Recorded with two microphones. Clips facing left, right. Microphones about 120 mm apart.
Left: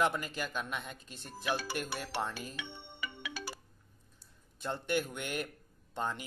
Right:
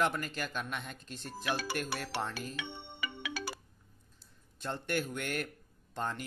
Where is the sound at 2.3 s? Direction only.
15° left (ahead or behind).